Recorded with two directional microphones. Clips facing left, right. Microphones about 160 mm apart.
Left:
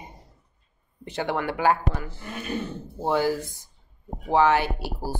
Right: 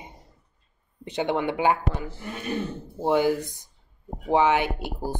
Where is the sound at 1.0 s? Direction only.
20° right (ahead or behind).